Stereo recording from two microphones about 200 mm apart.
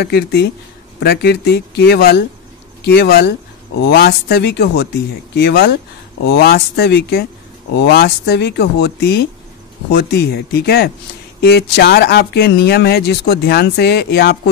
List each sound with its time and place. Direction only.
0.0 s speech: 55° left (ahead or behind)